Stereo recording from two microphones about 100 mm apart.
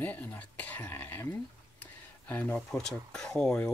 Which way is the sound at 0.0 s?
15° left (ahead or behind).